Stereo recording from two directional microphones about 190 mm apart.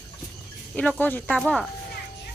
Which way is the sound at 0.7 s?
10° left (ahead or behind).